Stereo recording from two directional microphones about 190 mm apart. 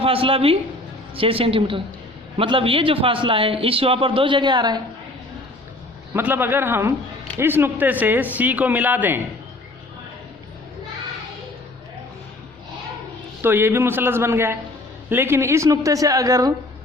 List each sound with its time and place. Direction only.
0.0 s a man's voice: 30° right (ahead or behind)
6.1 s speech: 10° right (ahead or behind)
13.4 s speech: 10° right (ahead or behind)